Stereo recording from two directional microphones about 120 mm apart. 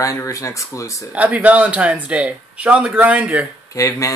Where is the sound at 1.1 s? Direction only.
10° right (ahead or behind).